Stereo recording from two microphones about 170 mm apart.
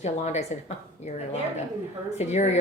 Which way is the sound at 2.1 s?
40° left (ahead or behind).